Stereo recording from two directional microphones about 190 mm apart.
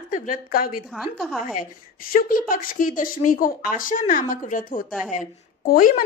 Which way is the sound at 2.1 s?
45° left (ahead or behind).